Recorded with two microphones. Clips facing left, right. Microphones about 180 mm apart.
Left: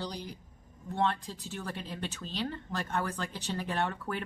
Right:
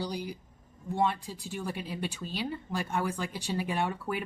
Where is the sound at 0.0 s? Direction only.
10° right (ahead or behind).